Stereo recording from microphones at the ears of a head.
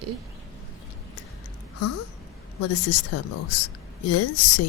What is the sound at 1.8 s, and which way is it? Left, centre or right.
A woman's voice, left.